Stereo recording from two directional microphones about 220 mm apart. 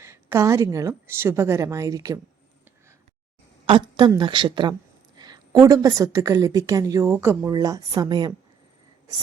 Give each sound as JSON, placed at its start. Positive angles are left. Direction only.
{"t": 0.0, "sound": "a woman's voice", "side_deg": -10}
{"t": 3.7, "sound": "a woman's voice", "side_deg": -20}